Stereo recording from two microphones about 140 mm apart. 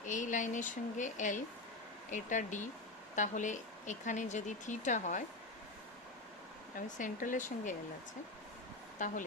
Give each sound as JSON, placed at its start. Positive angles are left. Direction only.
{"t": 0.0, "sound": "speech", "side_deg": 65}
{"t": 6.7, "sound": "speech", "side_deg": 65}
{"t": 9.0, "sound": "speech", "side_deg": 60}